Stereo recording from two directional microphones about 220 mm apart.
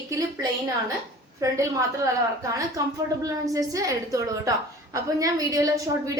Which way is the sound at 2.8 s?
15° right (ahead or behind).